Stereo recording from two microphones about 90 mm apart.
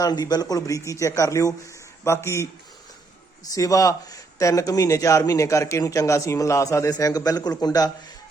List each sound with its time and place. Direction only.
0.0 s speech: 50° left (ahead or behind)
6.9 s speech: 45° left (ahead or behind)